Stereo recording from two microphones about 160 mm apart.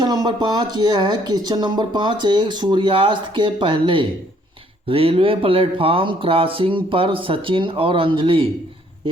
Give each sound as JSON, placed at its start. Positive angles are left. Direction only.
{"t": 0.0, "sound": "speech", "side_deg": -25}